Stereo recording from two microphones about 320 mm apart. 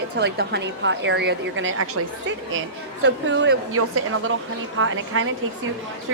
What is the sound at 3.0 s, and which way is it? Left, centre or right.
A woman's voice, right.